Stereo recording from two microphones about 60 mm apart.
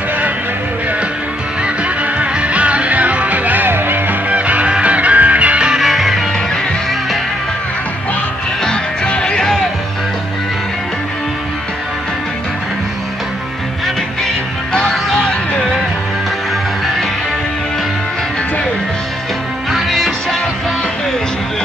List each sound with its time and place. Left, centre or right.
2.1 s music: right
4.3 s music: right
5.8 s music: centre
8.6 s music: centre
14.7 s music: centre
19.7 s music: centre